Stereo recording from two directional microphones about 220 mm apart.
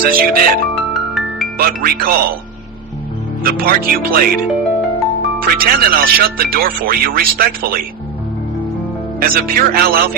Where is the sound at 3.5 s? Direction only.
40° right (ahead or behind).